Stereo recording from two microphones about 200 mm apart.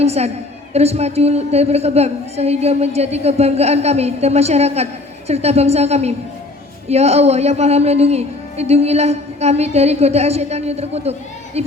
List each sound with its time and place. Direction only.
0.0 s speech: 30° right (ahead or behind)